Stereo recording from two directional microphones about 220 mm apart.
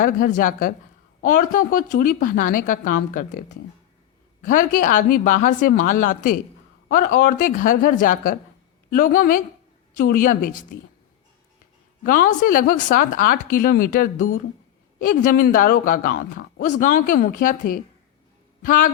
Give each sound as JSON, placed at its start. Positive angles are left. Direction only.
{"t": 0.0, "sound": "speech", "side_deg": 35}
{"t": 4.4, "sound": "speech", "side_deg": 40}
{"t": 12.0, "sound": "speech", "side_deg": 40}